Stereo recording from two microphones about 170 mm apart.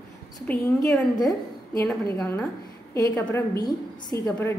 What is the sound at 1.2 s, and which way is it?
Speech, 20° left (ahead or behind).